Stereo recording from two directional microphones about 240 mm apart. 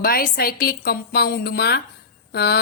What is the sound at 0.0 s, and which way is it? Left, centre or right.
Speech, left.